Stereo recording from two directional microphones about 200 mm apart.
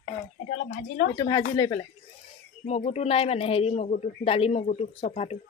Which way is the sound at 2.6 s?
35° left (ahead or behind).